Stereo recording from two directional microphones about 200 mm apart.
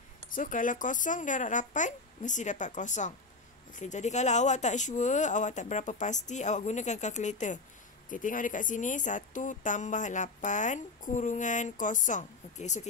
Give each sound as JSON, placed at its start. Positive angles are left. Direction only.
{"t": 0.3, "sound": "speech", "side_deg": 40}